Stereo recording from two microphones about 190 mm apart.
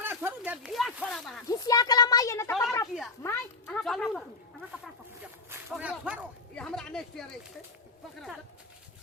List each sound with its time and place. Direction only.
0.0 s speech: 10° right (ahead or behind)
1.5 s a child's voice: 20° left (ahead or behind)
2.5 s a sound: centre (ahead or behind)
2.8 s speech: centre (ahead or behind)
3.2 s speech: 15° left (ahead or behind)
3.8 s speech: centre (ahead or behind)
5.7 s speech: 5° right (ahead or behind)